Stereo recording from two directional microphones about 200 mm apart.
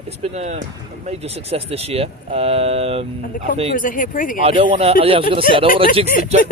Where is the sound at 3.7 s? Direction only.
45° left (ahead or behind).